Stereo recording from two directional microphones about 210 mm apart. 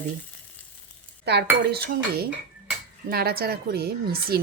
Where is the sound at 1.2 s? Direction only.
50° right (ahead or behind).